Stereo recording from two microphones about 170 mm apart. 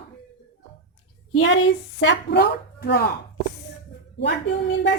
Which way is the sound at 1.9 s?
85° left.